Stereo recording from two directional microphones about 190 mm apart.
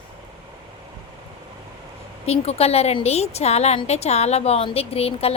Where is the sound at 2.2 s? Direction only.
35° left (ahead or behind).